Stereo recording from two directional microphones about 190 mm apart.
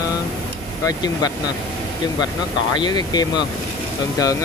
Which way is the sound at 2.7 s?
20° left (ahead or behind).